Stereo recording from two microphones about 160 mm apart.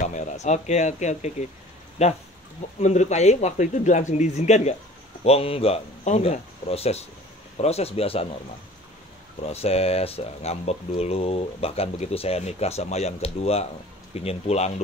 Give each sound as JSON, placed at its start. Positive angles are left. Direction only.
{"t": 0.1, "sound": "a man's voice", "side_deg": 50}
{"t": 9.5, "sound": "speech", "side_deg": 40}